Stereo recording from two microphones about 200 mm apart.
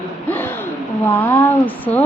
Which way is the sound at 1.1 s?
10° left (ahead or behind).